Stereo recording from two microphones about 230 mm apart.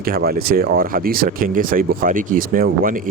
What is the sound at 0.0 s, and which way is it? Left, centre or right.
Speech, right.